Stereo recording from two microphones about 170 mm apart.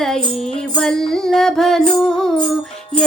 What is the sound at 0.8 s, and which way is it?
Music, 5° left (ahead or behind).